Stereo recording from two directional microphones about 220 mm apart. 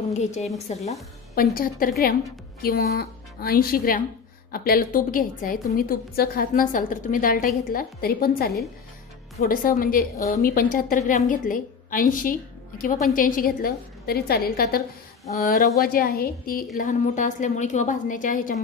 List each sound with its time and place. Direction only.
0.1 s a woman's voice: 30° left (ahead or behind)
1.3 s a woman's voice: 40° left (ahead or behind)
15.2 s a woman's voice: 30° left (ahead or behind)
15.8 s a woman's voice: 45° left (ahead or behind)